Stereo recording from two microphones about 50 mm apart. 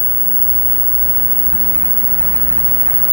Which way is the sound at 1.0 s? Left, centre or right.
Centre.